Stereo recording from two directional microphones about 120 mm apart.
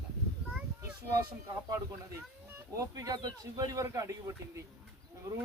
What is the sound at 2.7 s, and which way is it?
Speech, 25° right (ahead or behind).